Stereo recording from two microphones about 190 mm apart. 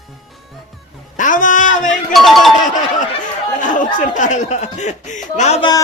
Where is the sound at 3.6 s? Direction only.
40° left (ahead or behind).